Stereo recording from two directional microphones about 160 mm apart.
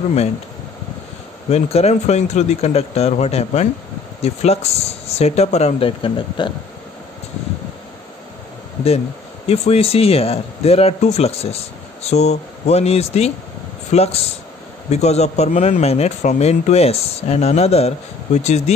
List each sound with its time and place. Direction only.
1.5 s speech: 40° left (ahead or behind)
9.5 s speech: 40° left (ahead or behind)